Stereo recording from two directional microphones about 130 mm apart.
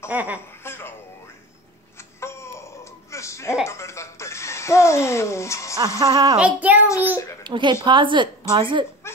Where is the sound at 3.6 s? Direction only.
20° left (ahead or behind).